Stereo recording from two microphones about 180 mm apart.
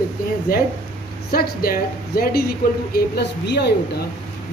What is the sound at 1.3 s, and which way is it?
Speech, 55° left (ahead or behind).